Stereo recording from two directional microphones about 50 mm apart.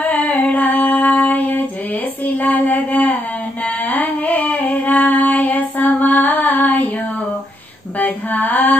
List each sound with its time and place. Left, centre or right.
0.0 s music: left
1.3 s a sound: left
2.2 s child singing: left
3.9 s singing: left
8.0 s female singing: left